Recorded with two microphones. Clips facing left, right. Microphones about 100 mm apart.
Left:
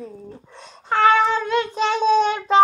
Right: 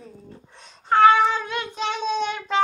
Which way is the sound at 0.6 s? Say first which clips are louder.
Right 2 dB; centre (ahead or behind).